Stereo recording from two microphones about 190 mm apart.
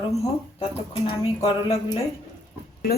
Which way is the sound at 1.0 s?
25° left (ahead or behind).